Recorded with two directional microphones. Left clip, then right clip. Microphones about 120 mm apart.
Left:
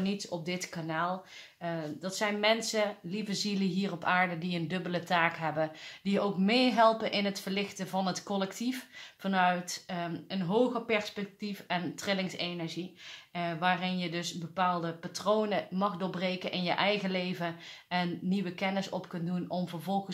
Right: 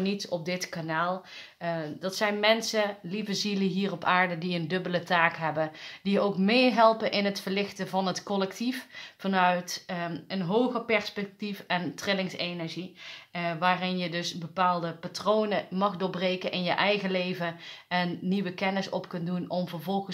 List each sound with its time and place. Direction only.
0.0 s speech: 25° right (ahead or behind)